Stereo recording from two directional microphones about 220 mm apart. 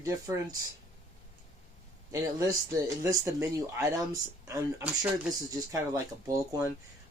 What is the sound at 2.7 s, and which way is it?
Speech, 15° right (ahead or behind).